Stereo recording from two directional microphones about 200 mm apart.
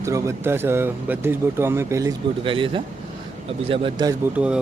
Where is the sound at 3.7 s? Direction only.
25° right (ahead or behind).